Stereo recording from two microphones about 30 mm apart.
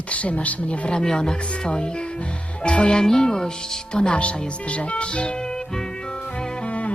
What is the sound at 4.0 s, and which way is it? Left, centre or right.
Speech, left.